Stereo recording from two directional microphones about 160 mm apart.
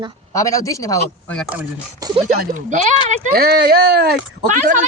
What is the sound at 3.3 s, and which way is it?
Speech, 75° right (ahead or behind).